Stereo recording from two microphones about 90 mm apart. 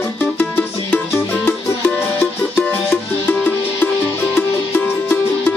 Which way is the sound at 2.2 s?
15° left (ahead or behind).